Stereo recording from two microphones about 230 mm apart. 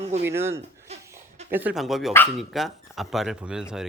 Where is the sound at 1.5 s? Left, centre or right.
Centre.